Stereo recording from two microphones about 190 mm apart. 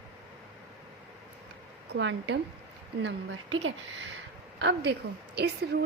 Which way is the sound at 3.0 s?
85° right.